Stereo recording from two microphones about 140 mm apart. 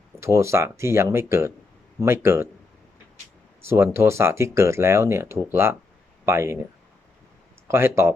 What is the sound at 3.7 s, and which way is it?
Speech, 15° right (ahead or behind).